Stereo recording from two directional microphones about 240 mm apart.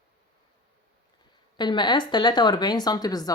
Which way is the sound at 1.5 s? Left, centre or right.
Centre.